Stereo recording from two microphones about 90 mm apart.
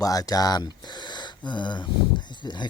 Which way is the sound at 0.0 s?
40° left (ahead or behind).